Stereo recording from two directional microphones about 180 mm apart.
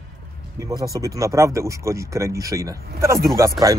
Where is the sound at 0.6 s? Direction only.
20° right (ahead or behind).